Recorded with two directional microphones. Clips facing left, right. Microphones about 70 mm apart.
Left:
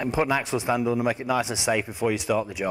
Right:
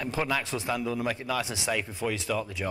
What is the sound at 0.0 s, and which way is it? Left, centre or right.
Speech, centre.